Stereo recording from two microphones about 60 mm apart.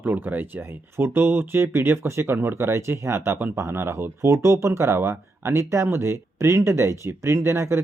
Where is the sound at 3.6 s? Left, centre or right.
Right.